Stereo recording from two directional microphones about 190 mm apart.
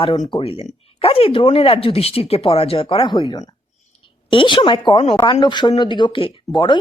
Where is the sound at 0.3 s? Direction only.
30° left (ahead or behind).